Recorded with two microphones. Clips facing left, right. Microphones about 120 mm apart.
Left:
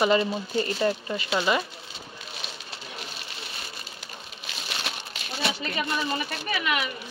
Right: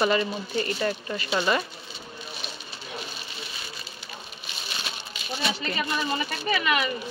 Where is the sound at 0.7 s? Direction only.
20° left (ahead or behind).